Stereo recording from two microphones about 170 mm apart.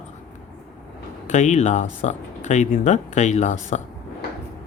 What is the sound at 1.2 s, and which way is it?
Speech, 45° left (ahead or behind).